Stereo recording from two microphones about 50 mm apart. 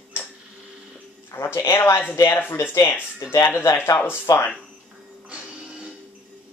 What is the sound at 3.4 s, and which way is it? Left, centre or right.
Speech, left.